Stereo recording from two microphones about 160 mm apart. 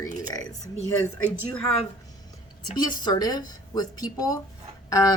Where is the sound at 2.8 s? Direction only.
25° left (ahead or behind).